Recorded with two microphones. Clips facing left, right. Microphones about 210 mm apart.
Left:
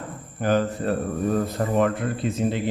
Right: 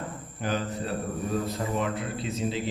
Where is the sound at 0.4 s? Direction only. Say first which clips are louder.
Left 8 dB; 55° left (ahead or behind).